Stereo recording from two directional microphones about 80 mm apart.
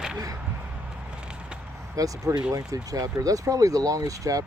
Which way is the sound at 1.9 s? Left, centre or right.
Right.